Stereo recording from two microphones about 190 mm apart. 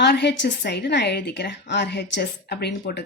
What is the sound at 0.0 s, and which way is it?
A woman's voice, 60° left (ahead or behind).